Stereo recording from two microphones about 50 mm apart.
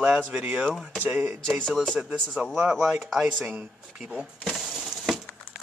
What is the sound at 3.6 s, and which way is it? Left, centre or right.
Speech, centre.